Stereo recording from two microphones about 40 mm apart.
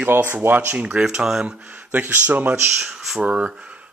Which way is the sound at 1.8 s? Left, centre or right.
Right.